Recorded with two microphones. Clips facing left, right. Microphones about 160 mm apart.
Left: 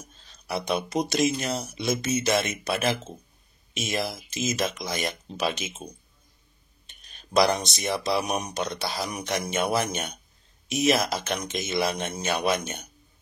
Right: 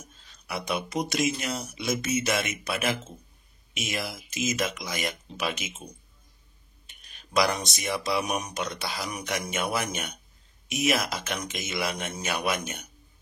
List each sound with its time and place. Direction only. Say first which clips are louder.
0.5 s speech: left 3 dB; 30° left (ahead or behind)
7.3 s speech: left 4 dB; 30° left (ahead or behind)